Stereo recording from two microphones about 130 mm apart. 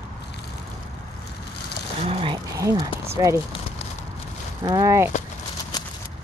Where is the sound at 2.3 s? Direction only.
25° right (ahead or behind).